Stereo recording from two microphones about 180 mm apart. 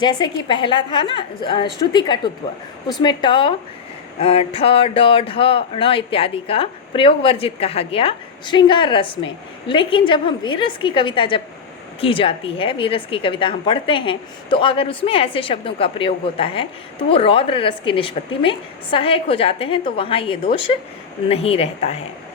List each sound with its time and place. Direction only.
0.0 s a woman's voice: 25° left (ahead or behind)